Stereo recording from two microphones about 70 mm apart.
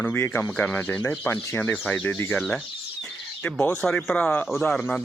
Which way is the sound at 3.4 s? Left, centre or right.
Centre.